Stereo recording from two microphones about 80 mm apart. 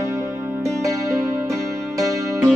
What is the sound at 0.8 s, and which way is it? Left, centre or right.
Music, right.